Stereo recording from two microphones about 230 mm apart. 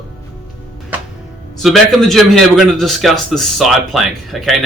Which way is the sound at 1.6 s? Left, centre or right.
Centre.